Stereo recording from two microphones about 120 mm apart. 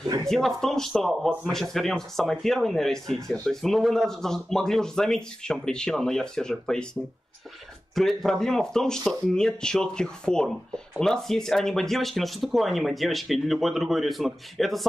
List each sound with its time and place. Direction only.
0.0 s speech: 30° right (ahead or behind)
0.3 s speech: 5° left (ahead or behind)
7.9 s speech: centre (ahead or behind)